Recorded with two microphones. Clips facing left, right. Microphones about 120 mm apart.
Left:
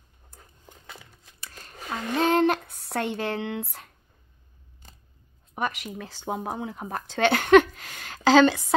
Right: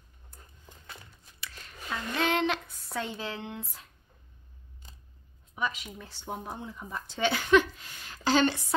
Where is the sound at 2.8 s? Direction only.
70° left (ahead or behind).